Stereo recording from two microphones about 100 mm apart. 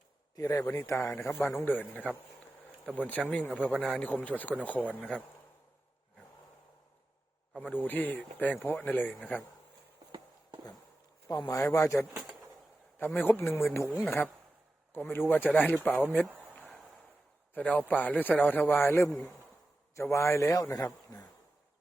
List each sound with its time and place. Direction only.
0.3 s a man's voice: 35° left (ahead or behind); by 5.0 s 15° left (ahead or behind)
7.6 s speech: 15° left (ahead or behind)
11.3 s a man's voice: 35° left (ahead or behind)
13.0 s a man's voice: 20° left (ahead or behind)
16.3 s a sound: 15° right (ahead or behind)
17.5 s a man's voice: 15° left (ahead or behind); by 21.2 s 35° left (ahead or behind)